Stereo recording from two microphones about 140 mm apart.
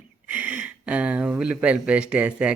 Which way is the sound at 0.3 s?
10° right (ahead or behind).